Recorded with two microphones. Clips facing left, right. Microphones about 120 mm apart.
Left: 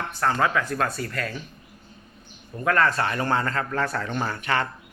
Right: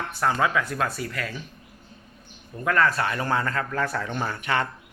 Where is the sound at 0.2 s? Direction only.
10° right (ahead or behind).